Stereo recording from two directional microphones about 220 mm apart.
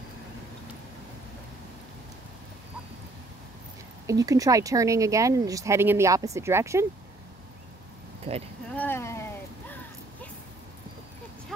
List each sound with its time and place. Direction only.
4.1 s speech: 15° right (ahead or behind)
8.3 s speech: 25° right (ahead or behind)
8.7 s a sound: 10° left (ahead or behind)